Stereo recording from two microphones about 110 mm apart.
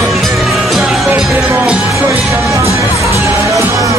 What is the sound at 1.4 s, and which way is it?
Music, 15° right (ahead or behind).